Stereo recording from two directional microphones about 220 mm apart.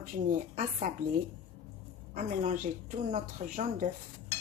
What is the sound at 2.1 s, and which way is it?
Speech, 35° right (ahead or behind).